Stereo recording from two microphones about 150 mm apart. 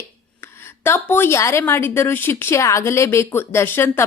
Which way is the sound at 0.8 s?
15° left (ahead or behind).